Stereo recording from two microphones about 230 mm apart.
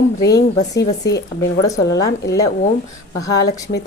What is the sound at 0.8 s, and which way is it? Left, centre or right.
Speech, left.